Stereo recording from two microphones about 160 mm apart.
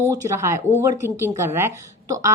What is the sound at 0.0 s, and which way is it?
Speech, 20° right (ahead or behind).